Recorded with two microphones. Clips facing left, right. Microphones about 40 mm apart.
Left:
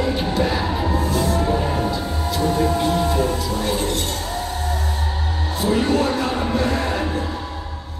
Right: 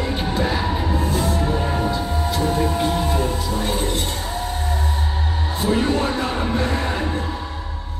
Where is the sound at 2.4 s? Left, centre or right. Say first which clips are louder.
Left 3 dB; centre.